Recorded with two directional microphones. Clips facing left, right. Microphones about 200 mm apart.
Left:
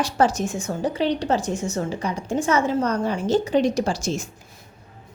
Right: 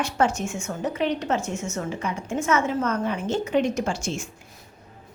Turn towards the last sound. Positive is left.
turn(degrees=40)  # may be behind; listen again after turning